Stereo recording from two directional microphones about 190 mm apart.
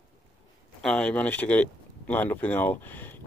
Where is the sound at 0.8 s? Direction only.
5° left (ahead or behind).